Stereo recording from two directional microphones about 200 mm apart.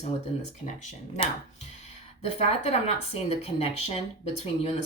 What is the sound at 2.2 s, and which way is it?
Speech, 30° left (ahead or behind).